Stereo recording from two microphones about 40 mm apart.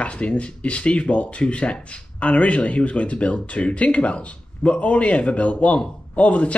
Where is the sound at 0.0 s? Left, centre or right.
Left.